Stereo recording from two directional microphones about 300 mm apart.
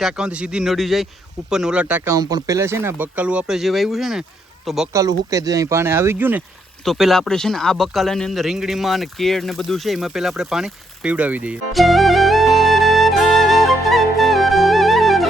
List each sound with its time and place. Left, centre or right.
0.0 s a man's voice: centre